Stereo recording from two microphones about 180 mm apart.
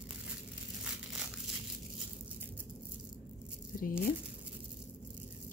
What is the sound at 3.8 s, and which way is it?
Speech, 50° left (ahead or behind).